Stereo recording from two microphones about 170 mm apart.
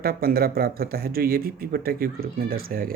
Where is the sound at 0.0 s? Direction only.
65° right (ahead or behind).